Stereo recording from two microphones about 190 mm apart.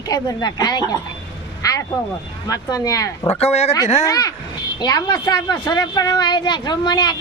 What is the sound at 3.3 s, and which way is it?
Speech, 35° left (ahead or behind).